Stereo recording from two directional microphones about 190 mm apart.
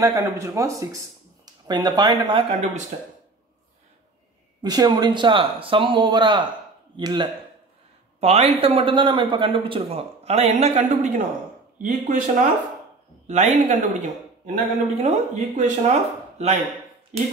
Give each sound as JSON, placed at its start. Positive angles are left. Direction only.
{"t": 0.0, "sound": "speech", "side_deg": -15}
{"t": 4.6, "sound": "speech", "side_deg": -20}
{"t": 8.2, "sound": "speech", "side_deg": -35}